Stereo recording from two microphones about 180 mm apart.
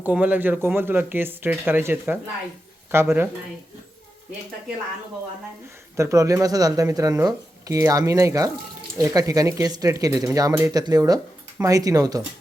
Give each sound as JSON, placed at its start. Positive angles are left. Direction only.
{"t": 0.0, "sound": "speech", "side_deg": -10}
{"t": 6.0, "sound": "speech", "side_deg": -15}